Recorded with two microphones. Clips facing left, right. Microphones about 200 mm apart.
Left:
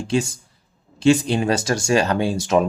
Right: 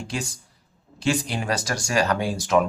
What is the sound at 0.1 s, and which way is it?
Speech, 25° left (ahead or behind).